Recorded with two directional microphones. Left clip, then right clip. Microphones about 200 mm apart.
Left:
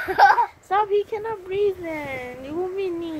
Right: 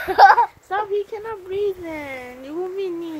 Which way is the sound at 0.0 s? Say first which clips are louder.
Right 4 dB; 40° right (ahead or behind).